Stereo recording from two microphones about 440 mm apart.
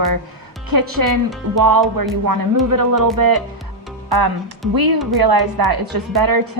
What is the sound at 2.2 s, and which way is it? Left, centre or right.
Speech, right.